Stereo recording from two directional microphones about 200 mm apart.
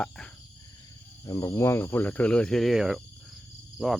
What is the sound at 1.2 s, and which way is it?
Speech, 15° left (ahead or behind).